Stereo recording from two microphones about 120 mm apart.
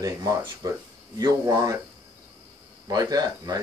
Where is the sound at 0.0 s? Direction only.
30° right (ahead or behind).